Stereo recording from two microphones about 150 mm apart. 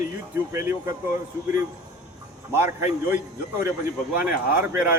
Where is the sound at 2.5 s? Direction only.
15° right (ahead or behind).